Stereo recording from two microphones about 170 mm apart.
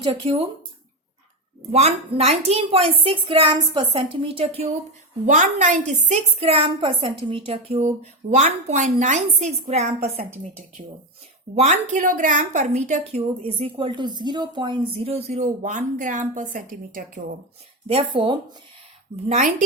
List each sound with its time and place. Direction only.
0.0 s a woman's voice: 30° right (ahead or behind)
1.7 s a woman's voice: 40° right (ahead or behind)
5.2 s a woman's voice: 50° right (ahead or behind)
11.5 s a woman's voice: 45° right (ahead or behind)
13.6 s a woman's voice: 30° right (ahead or behind); by 17.3 s 55° right (ahead or behind)
17.8 s speech: 30° right (ahead or behind)